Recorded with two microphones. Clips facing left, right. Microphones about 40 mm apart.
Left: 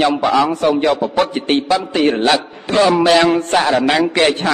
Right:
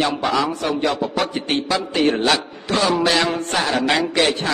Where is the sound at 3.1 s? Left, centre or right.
Left.